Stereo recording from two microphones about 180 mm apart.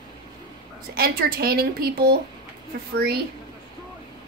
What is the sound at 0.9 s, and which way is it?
Speech, 55° right (ahead or behind).